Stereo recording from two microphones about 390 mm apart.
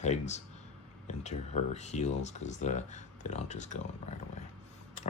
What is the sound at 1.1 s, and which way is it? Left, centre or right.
Speech, centre.